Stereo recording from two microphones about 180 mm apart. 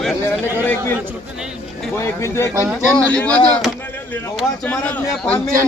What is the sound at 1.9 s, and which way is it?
Speech, 15° left (ahead or behind).